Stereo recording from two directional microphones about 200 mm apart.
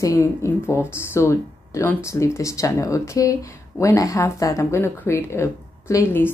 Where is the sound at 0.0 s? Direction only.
15° left (ahead or behind).